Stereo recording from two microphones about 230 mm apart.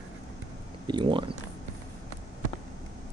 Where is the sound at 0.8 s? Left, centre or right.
Centre.